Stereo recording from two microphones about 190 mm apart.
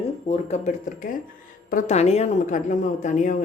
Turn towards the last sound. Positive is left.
turn(degrees=40)  # may be behind; listen again after turning